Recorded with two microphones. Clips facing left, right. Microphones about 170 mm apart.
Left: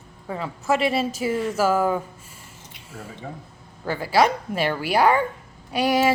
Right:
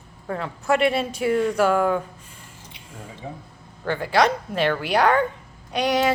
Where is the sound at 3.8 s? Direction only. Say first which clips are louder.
Even; 5° left (ahead or behind).